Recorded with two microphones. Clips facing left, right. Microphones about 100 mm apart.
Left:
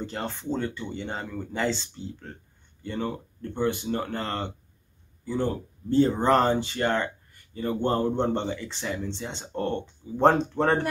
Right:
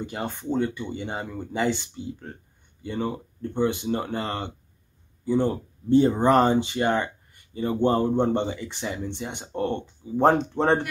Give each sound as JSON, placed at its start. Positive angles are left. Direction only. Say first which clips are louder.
{"t": 0.0, "sound": "speech", "louder": "right 1 dB", "side_deg": -15}